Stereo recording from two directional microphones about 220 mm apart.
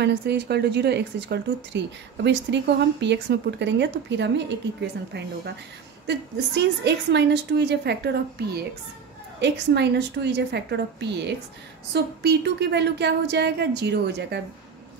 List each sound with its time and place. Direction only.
0.0 s a woman's voice: 50° right (ahead or behind)
6.0 s a woman's voice: 50° right (ahead or behind)